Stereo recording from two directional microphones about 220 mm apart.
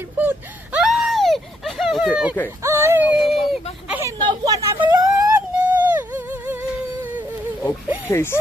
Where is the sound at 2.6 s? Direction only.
10° right (ahead or behind).